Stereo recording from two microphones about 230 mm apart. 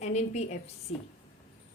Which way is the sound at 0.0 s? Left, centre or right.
Left.